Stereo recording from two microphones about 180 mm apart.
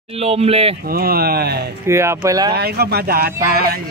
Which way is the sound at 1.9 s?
15° right (ahead or behind).